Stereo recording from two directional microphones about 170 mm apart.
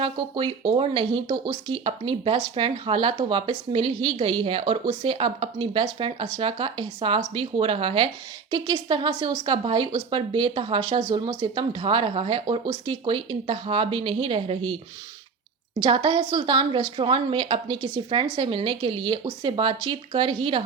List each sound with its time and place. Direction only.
0.0 s speech: 30° right (ahead or behind)
15.8 s speech: 30° right (ahead or behind)